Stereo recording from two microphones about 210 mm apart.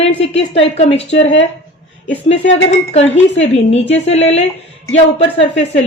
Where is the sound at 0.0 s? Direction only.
30° left (ahead or behind).